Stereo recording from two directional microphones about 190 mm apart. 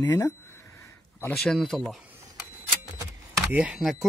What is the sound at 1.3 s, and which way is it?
Speech, centre (ahead or behind).